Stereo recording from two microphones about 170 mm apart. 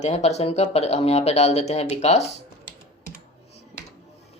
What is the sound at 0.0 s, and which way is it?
Speech, 40° left (ahead or behind).